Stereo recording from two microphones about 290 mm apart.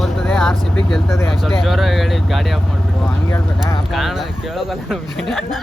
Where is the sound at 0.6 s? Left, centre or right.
Centre.